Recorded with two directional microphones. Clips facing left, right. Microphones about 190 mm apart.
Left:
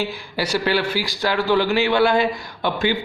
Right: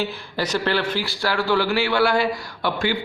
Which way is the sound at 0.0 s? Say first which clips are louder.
Left 1 dB; 10° left (ahead or behind).